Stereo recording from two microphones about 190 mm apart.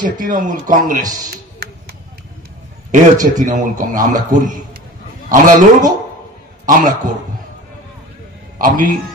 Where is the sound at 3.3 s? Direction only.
40° right (ahead or behind).